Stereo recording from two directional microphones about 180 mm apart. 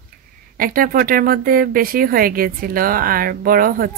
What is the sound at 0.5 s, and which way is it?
A woman's voice, 50° right (ahead or behind).